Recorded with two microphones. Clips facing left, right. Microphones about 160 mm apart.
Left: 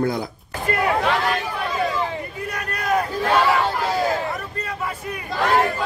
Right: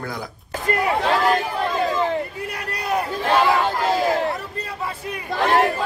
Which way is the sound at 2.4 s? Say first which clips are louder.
Left 2 dB; 30° right (ahead or behind).